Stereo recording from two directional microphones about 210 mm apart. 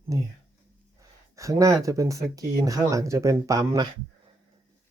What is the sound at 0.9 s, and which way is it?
Speech, 15° right (ahead or behind).